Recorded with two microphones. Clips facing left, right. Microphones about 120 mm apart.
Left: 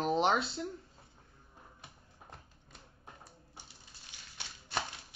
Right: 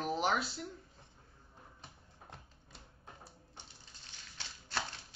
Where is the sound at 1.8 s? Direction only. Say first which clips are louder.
Even; centre (ahead or behind).